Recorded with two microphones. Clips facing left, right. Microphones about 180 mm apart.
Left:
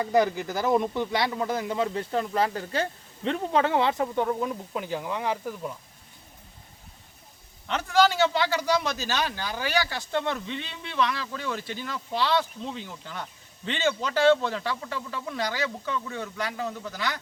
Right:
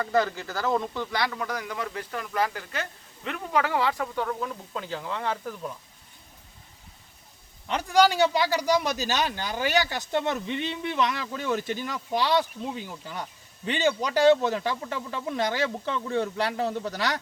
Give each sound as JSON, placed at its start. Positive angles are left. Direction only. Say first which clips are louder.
{"t": 0.0, "sound": "a man's voice", "louder": "left 2 dB", "side_deg": 15}
{"t": 7.7, "sound": "a man's voice", "louder": "right 1 dB", "side_deg": -10}